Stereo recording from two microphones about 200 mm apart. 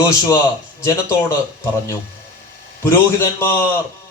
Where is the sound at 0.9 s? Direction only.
10° left (ahead or behind).